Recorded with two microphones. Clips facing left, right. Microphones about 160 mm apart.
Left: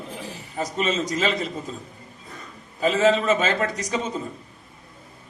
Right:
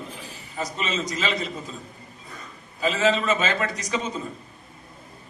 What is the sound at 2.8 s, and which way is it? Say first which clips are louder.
A man's voice: left 3 dB; 50° left (ahead or behind).